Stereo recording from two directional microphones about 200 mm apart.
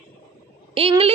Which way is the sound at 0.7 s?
30° right (ahead or behind).